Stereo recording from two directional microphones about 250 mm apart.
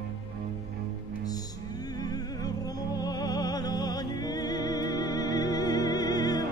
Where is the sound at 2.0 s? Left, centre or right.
Centre.